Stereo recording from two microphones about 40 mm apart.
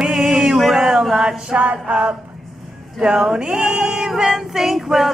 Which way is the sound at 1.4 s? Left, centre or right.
Right.